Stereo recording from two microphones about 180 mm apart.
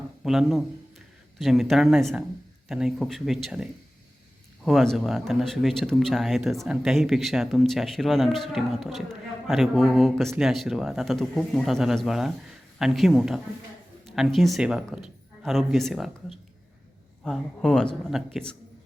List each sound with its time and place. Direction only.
0.3 s speech: centre (ahead or behind)